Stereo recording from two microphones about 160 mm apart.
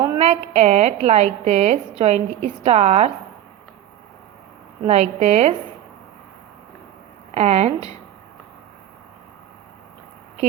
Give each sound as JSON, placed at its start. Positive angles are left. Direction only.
{"t": 0.2, "sound": "a woman's voice", "side_deg": -40}
{"t": 4.9, "sound": "a woman's voice", "side_deg": -45}
{"t": 7.3, "sound": "speech", "side_deg": -45}